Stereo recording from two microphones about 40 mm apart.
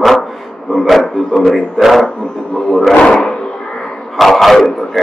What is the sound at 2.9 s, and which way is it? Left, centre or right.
Speech, left.